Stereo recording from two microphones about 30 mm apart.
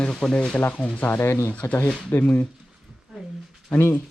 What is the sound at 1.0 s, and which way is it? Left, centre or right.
Speech, left.